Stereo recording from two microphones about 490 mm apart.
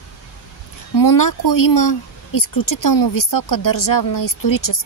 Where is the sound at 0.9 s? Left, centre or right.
Left.